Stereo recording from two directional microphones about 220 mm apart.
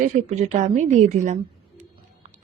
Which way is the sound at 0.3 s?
30° right (ahead or behind).